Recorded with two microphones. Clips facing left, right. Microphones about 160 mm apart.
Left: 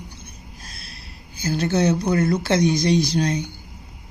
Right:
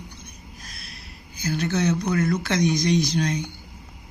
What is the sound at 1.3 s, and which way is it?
Speech, 30° left (ahead or behind).